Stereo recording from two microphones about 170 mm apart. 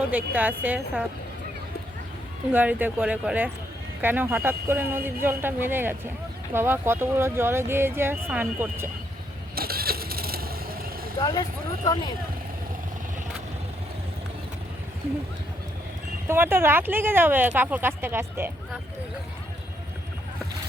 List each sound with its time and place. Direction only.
0.1 s speech: 10° right (ahead or behind)
2.5 s speech: 10° right (ahead or behind)
9.6 s a sound: 65° right (ahead or behind)
11.2 s speech: 20° left (ahead or behind)
16.3 s speech: 15° right (ahead or behind)